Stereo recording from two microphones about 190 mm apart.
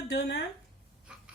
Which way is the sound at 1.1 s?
5° right (ahead or behind).